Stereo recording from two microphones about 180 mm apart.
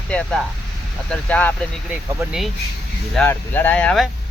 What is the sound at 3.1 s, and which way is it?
Speech, 10° left (ahead or behind).